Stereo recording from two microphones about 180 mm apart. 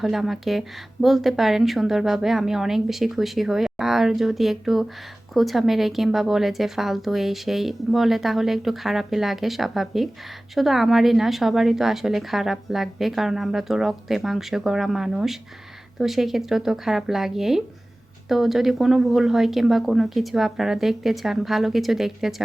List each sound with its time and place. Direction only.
0.0 s speech: centre (ahead or behind)